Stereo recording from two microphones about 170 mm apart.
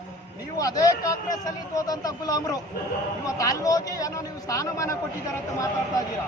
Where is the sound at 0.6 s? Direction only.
20° left (ahead or behind).